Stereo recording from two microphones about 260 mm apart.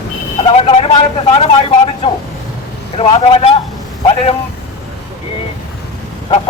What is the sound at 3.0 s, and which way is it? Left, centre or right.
Speech, left.